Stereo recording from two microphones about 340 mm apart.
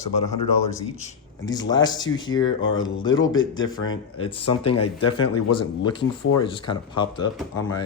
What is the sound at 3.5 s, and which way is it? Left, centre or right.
Speech, left.